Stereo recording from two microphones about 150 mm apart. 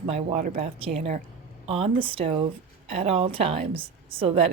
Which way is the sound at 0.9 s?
50° right (ahead or behind).